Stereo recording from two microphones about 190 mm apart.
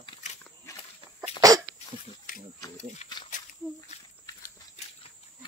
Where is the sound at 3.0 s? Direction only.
40° left (ahead or behind).